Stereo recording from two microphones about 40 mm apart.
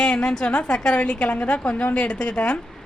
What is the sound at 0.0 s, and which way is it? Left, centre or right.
A woman's voice, centre.